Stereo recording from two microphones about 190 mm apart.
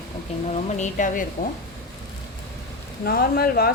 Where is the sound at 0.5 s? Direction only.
40° left (ahead or behind).